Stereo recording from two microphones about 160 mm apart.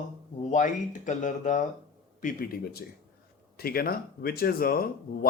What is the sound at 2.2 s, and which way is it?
Speech, 65° left (ahead or behind).